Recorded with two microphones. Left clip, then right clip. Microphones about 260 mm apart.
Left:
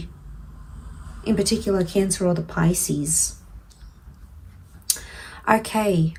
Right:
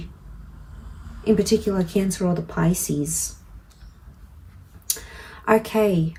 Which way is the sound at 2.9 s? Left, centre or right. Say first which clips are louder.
Right 1 dB; left.